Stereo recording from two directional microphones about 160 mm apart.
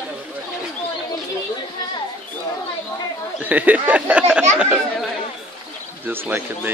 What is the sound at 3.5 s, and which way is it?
Speech, 10° right (ahead or behind).